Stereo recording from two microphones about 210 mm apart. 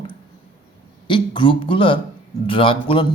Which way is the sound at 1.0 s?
25° left (ahead or behind).